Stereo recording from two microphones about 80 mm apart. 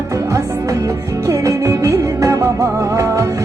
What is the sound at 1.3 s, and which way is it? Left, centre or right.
Music, right.